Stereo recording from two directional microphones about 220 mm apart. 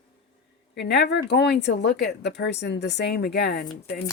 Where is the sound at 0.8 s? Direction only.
50° left (ahead or behind).